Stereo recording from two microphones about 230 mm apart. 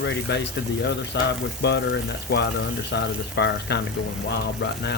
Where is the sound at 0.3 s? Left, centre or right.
Left.